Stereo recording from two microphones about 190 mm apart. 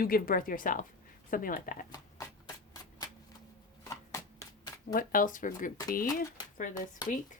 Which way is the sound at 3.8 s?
15° left (ahead or behind).